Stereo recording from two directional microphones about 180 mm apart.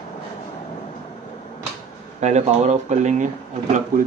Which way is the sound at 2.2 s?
40° right (ahead or behind).